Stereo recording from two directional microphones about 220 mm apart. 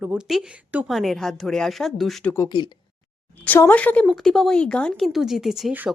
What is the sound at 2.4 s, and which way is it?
Speech, 20° left (ahead or behind).